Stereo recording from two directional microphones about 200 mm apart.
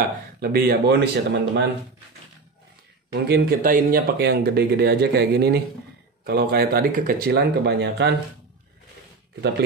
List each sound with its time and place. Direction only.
0.4 s speech: 50° right (ahead or behind)
3.1 s speech: 50° right (ahead or behind)